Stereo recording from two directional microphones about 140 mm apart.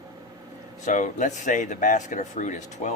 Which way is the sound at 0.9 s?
60° left (ahead or behind).